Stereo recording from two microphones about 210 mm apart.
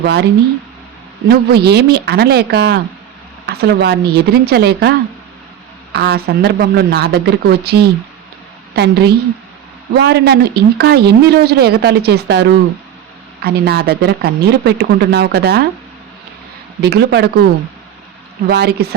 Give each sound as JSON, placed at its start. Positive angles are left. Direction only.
{"t": 0.0, "sound": "speech", "side_deg": -50}
{"t": 1.3, "sound": "a woman's voice", "side_deg": -50}
{"t": 16.8, "sound": "speech", "side_deg": -50}
{"t": 18.4, "sound": "speech", "side_deg": -50}